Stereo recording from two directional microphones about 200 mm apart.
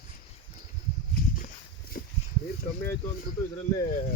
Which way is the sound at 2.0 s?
50° left (ahead or behind).